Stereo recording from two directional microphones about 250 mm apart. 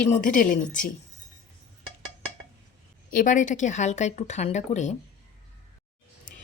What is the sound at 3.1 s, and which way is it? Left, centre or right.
Speech, left.